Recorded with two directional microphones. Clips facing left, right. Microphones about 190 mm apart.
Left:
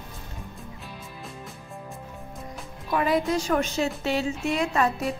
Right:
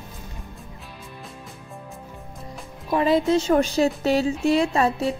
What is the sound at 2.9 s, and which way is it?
A woman's voice, 25° right (ahead or behind).